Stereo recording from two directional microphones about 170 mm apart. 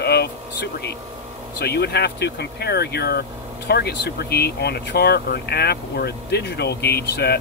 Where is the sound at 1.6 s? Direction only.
70° left (ahead or behind).